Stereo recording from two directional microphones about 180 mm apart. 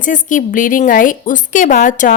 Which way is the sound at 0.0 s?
45° left (ahead or behind).